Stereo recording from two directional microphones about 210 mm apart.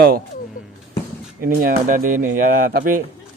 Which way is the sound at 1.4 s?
45° right (ahead or behind).